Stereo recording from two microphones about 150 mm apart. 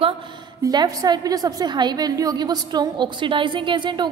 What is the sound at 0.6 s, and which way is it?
A woman's voice, 25° right (ahead or behind).